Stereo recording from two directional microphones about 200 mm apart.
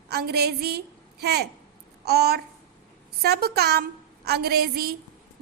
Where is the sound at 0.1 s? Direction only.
55° right (ahead or behind).